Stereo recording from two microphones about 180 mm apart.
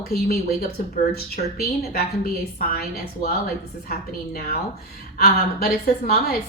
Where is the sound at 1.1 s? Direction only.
60° left (ahead or behind).